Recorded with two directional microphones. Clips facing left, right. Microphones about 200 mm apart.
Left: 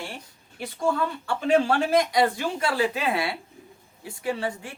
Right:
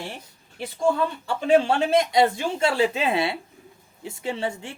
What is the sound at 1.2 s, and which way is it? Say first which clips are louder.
Speech: right 2 dB; 25° right (ahead or behind).